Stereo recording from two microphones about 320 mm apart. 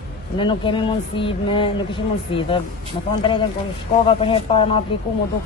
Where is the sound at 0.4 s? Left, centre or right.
Centre.